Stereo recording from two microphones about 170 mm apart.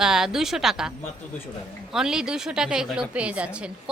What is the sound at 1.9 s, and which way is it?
A woman's voice, 5° right (ahead or behind).